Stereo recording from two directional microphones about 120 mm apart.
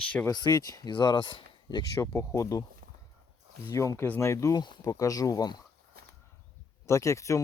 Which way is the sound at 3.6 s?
25° left (ahead or behind).